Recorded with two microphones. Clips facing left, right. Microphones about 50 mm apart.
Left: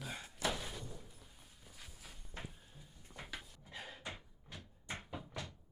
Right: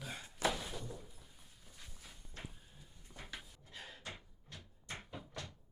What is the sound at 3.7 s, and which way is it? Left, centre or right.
Cupboard open or close, centre.